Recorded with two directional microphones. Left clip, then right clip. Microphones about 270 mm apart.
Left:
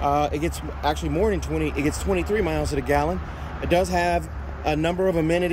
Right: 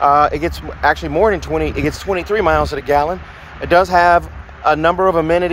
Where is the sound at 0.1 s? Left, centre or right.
Right.